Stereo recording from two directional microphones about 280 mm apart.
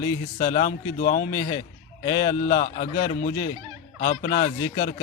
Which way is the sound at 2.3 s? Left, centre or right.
Left.